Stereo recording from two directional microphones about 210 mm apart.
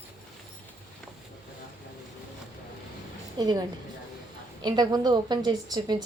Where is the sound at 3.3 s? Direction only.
20° right (ahead or behind).